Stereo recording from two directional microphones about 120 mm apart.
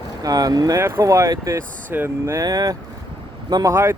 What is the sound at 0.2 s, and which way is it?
Speech, 30° right (ahead or behind).